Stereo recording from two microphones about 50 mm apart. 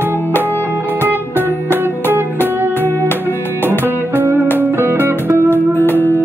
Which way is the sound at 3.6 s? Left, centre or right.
Right.